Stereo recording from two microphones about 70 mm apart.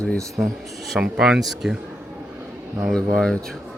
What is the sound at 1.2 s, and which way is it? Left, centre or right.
Speech, centre.